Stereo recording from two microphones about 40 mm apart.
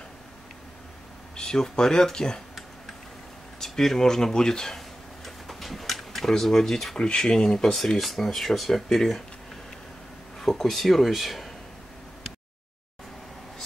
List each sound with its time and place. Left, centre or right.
1.3 s speech: centre
3.5 s tick-tock: centre
7.0 s speech: centre
8.2 s speech: centre
10.5 s speech: centre